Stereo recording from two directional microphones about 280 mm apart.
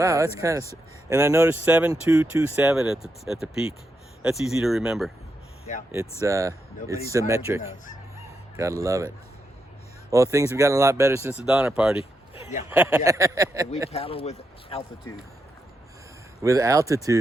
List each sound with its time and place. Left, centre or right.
0.0 s speech: centre
10.3 s speech: centre
12.3 s a sound: left
12.7 s speech: centre
13.9 s speech: centre
16.4 s speech: centre